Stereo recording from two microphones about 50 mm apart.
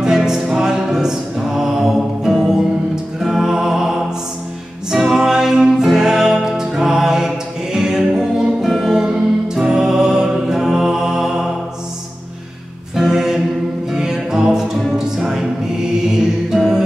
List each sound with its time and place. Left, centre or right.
0.0 s music: centre
12.9 s music: centre